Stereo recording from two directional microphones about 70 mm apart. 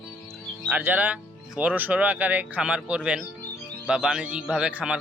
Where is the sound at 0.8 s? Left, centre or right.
Right.